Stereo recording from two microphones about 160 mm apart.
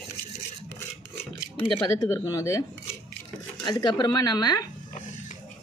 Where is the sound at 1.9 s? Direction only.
20° left (ahead or behind).